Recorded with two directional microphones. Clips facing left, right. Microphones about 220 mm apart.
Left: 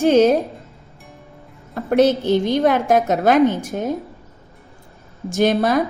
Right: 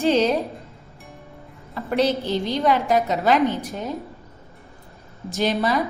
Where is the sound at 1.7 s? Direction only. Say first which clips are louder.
Left 6 dB; 50° left (ahead or behind).